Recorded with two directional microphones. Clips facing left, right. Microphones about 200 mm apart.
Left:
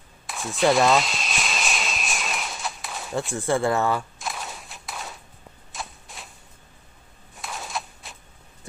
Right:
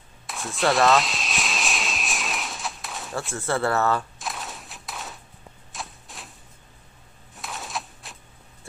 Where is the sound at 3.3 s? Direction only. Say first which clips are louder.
Left 1 dB; 15° left (ahead or behind).